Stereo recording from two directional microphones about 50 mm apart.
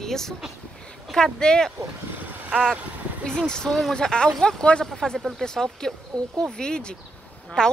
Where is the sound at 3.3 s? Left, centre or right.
Centre.